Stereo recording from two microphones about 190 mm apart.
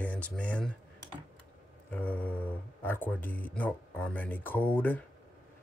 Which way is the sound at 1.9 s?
10° left (ahead or behind).